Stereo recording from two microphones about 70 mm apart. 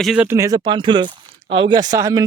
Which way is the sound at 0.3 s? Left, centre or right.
Right.